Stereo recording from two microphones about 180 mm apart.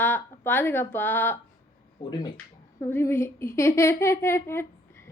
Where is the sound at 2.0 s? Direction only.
25° left (ahead or behind).